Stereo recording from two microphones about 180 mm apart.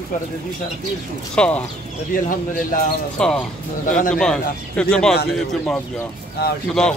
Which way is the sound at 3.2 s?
5° left (ahead or behind).